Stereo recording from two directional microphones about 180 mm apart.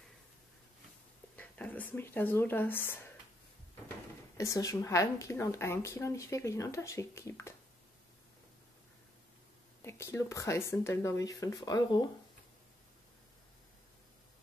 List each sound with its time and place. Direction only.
1.3 s speech: 10° left (ahead or behind)
4.4 s a woman's voice: 20° left (ahead or behind)
9.8 s a woman's voice: 15° left (ahead or behind)